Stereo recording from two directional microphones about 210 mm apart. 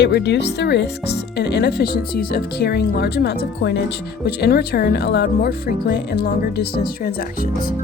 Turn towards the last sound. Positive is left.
turn(degrees=45)  # may be behind; listen again after turning